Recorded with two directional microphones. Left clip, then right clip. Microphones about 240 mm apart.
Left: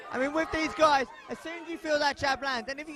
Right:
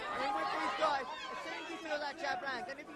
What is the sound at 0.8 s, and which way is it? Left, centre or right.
A man's voice, left.